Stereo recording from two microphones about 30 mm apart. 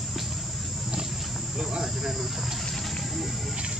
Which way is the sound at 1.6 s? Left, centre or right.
Centre.